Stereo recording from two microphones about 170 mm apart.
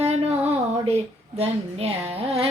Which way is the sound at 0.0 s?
35° right (ahead or behind).